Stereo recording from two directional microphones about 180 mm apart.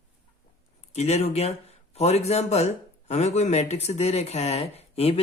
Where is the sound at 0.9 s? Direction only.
35° left (ahead or behind).